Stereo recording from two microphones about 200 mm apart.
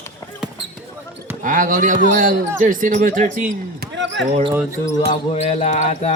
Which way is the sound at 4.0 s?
65° right (ahead or behind).